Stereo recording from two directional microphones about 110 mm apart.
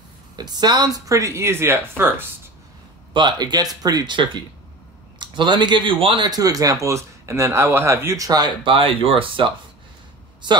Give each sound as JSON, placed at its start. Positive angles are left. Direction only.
{"t": 0.4, "sound": "speech", "side_deg": -40}
{"t": 3.1, "sound": "speech", "side_deg": -45}
{"t": 6.2, "sound": "speech", "side_deg": -35}
{"t": 8.6, "sound": "speech", "side_deg": -55}